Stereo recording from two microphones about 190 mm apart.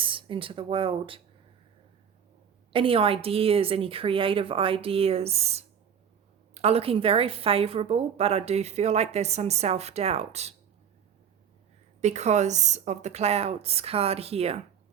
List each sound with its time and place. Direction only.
0.0 s speech: 25° right (ahead or behind)
2.7 s a woman's voice: 30° right (ahead or behind)
11.9 s a woman's voice: 35° right (ahead or behind)